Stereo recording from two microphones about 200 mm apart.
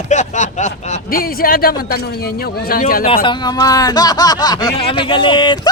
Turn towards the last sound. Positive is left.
turn(degrees=25)  # may be behind; listen again after turning